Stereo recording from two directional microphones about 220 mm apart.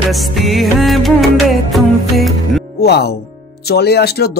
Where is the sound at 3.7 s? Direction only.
45° left (ahead or behind).